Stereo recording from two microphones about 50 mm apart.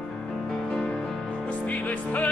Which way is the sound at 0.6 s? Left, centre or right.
Centre.